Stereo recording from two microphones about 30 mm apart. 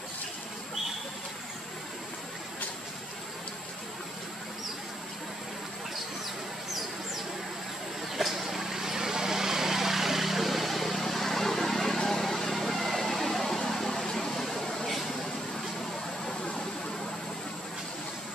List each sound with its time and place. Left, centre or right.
8.2 s vehicle: centre
16.5 s vehicle: centre